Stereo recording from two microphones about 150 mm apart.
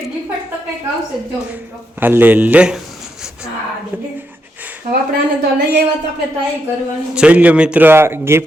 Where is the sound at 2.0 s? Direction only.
15° right (ahead or behind).